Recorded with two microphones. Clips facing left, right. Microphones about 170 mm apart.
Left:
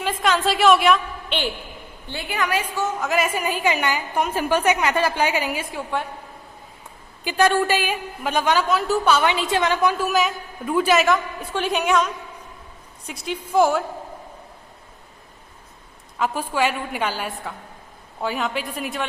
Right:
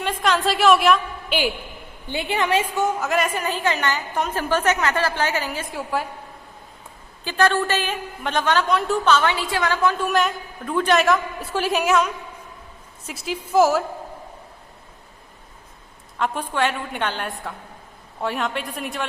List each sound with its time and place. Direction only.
0.0 s a woman's voice: centre (ahead or behind)
2.0 s a woman's voice: 25° right (ahead or behind)
3.0 s a woman's voice: centre (ahead or behind)
5.7 s a woman's voice: 5° right (ahead or behind)
7.3 s a woman's voice: 15° left (ahead or behind)
10.0 s a woman's voice: centre (ahead or behind)
16.1 s a woman's voice: 5° left (ahead or behind)